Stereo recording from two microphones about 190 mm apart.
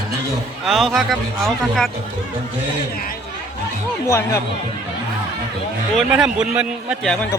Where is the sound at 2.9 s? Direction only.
50° left (ahead or behind).